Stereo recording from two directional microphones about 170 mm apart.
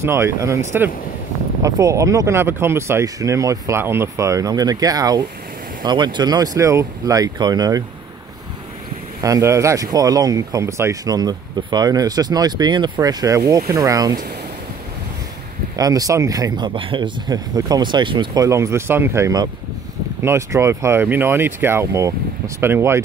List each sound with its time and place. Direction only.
0.0 s speech: 15° right (ahead or behind)
9.2 s speech: 20° right (ahead or behind)
15.7 s speech: 20° right (ahead or behind)